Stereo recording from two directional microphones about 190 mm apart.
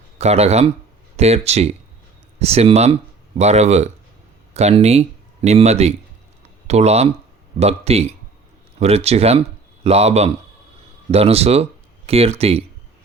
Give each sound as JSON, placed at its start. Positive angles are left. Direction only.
{"t": 0.2, "sound": "speech", "side_deg": -35}